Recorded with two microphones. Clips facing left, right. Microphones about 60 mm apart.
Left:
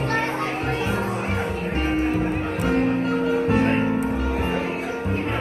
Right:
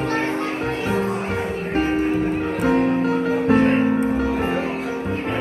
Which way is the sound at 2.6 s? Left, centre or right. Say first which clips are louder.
Right 3 dB; right.